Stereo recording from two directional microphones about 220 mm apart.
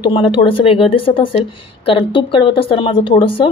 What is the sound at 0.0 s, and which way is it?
Speech, 25° left (ahead or behind).